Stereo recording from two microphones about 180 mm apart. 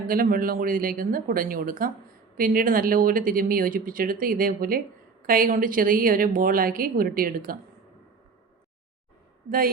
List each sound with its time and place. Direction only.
0.1 s speech: 50° right (ahead or behind)